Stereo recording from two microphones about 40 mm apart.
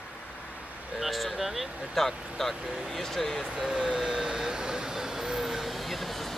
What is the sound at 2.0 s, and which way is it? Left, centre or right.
Speech, centre.